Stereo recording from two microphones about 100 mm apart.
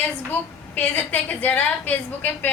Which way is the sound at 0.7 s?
20° left (ahead or behind).